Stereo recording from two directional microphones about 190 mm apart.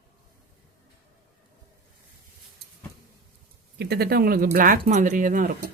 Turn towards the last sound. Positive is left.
turn(degrees=-45)  # may be behind; listen again after turning